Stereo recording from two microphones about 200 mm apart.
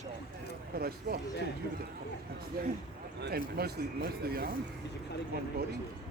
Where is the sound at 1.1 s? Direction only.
55° right (ahead or behind).